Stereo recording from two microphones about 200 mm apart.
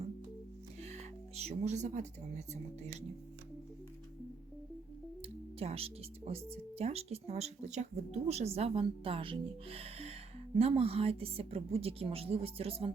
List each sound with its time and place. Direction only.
0.9 s music: 30° right (ahead or behind)
5.5 s speech: 30° right (ahead or behind)